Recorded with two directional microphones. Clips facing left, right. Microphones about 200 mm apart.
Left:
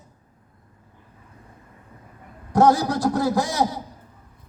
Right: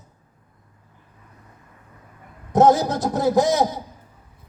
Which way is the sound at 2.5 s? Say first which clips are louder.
Right 2 dB; 20° right (ahead or behind).